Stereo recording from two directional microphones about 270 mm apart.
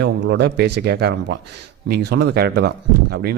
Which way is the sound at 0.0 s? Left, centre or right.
Right.